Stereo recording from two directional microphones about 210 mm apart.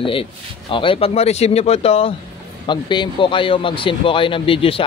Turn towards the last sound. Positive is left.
turn(degrees=25)  # may be behind; listen again after turning